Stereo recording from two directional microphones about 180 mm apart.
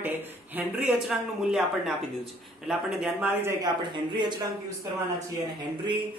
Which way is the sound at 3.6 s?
25° right (ahead or behind).